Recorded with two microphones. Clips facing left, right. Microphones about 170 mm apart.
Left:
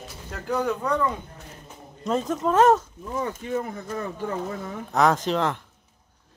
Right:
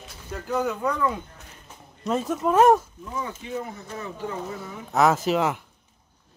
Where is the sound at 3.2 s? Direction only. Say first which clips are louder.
Left 4 dB; 50° left (ahead or behind).